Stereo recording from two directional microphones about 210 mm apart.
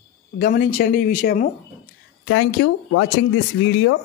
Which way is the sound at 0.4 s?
45° left (ahead or behind).